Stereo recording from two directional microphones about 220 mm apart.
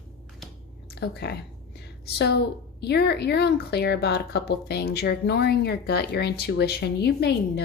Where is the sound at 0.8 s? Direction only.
45° left (ahead or behind).